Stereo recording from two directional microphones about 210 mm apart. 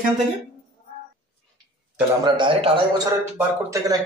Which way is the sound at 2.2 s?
25° right (ahead or behind).